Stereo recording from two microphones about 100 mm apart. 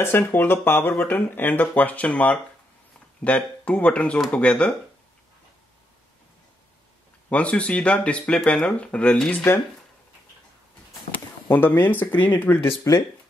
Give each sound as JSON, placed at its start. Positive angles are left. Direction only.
{"t": 0.0, "sound": "speech", "side_deg": 20}
{"t": 7.2, "sound": "speech", "side_deg": 15}
{"t": 11.1, "sound": "speech", "side_deg": 20}